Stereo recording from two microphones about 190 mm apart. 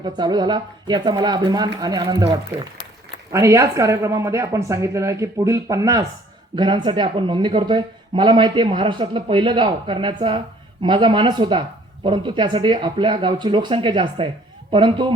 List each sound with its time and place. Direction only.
0.0 s speech: 20° right (ahead or behind)